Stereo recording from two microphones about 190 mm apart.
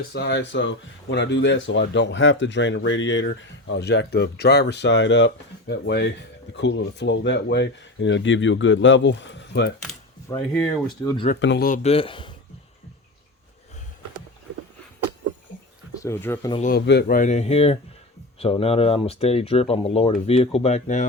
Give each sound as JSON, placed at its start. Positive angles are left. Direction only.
{"t": 0.1, "sound": "speech", "side_deg": 60}
{"t": 10.3, "sound": "speech", "side_deg": 15}
{"t": 11.3, "sound": "speech", "side_deg": 70}
{"t": 11.6, "sound": "speech", "side_deg": 45}
{"t": 11.9, "sound": "speech", "side_deg": 30}
{"t": 16.0, "sound": "speech", "side_deg": 15}
{"t": 16.6, "sound": "speech", "side_deg": 60}